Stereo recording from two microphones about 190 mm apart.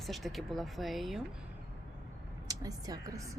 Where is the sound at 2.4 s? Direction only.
20° right (ahead or behind).